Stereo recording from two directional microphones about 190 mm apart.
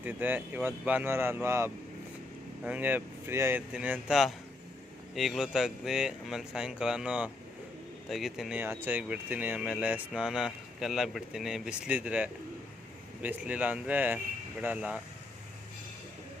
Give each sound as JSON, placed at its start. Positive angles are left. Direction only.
{"t": 0.0, "sound": "speech", "side_deg": -10}